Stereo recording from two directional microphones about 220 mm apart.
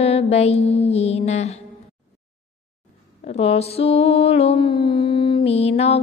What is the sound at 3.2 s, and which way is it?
Mantra, 25° left (ahead or behind).